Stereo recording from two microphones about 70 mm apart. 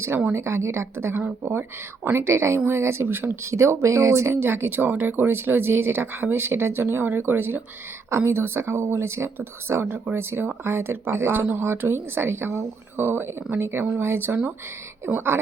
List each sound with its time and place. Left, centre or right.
0.3 s speech: right
1.1 s speech: right
2.1 s speech: right